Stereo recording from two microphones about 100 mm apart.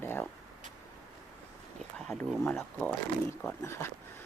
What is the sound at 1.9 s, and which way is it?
Speech, 5° left (ahead or behind).